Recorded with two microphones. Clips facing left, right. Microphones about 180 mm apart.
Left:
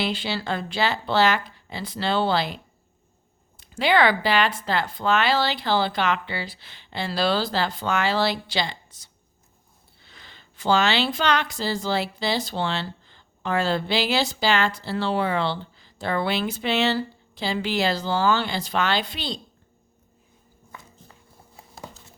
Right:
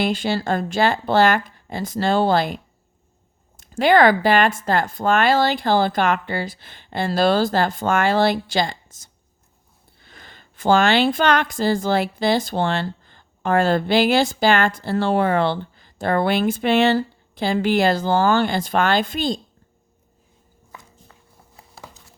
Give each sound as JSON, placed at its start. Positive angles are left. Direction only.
{"t": 0.0, "sound": "a woman's voice", "side_deg": -45}
{"t": 3.6, "sound": "a woman's voice", "side_deg": -45}
{"t": 21.5, "sound": "a sound", "side_deg": 20}